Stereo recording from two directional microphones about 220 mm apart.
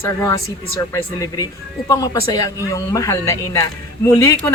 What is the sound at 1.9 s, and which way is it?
A woman's voice, 15° left (ahead or behind).